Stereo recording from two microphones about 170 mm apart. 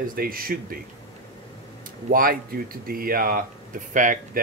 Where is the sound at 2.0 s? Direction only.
55° right (ahead or behind).